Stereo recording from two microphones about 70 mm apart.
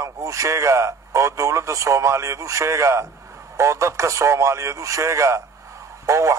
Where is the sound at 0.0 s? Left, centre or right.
Right.